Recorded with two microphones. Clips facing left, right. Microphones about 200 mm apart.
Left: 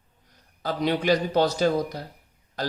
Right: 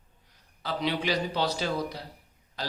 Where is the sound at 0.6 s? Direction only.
45° left (ahead or behind).